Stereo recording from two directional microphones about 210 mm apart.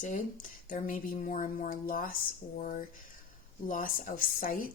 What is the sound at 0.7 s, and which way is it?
Speech, 40° left (ahead or behind).